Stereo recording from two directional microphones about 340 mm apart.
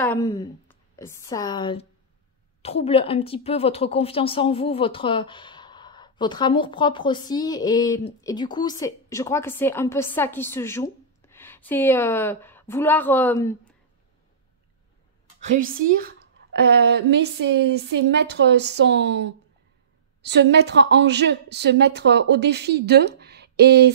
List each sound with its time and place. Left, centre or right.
0.0 s a woman's voice: centre
15.5 s a woman's voice: right